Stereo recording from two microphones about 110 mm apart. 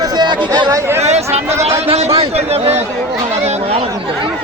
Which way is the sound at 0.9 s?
85° right.